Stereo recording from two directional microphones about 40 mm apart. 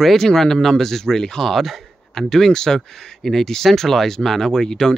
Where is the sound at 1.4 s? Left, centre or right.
Centre.